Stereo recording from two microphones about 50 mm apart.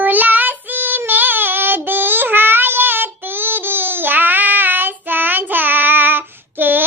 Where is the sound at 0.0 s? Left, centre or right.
Right.